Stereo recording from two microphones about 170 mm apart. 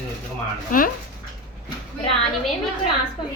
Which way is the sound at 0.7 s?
55° left (ahead or behind).